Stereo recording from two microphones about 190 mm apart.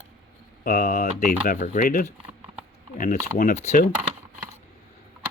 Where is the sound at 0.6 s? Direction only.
50° left (ahead or behind).